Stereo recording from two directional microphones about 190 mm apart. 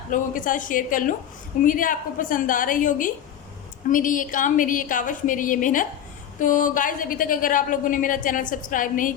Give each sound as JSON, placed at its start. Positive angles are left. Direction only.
{"t": 0.1, "sound": "a woman's voice", "side_deg": 45}